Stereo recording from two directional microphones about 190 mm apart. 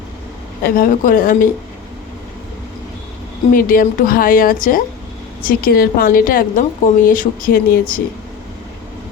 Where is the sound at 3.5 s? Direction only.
45° left (ahead or behind).